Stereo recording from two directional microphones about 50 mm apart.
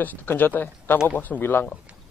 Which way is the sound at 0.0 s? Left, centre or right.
Left.